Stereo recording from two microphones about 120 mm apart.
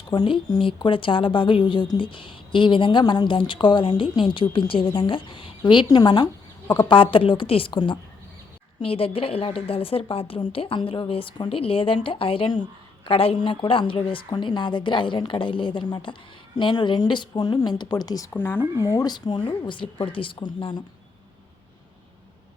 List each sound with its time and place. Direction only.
0.1 s a woman's voice: 35° left (ahead or behind)
18.3 s speech: 15° left (ahead or behind)
18.8 s speech: 30° left (ahead or behind)